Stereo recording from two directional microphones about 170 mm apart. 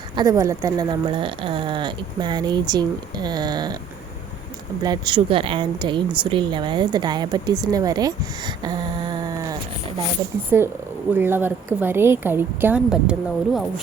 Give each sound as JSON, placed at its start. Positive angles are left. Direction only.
{"t": 0.2, "sound": "speech", "side_deg": -20}
{"t": 4.8, "sound": "speech", "side_deg": -25}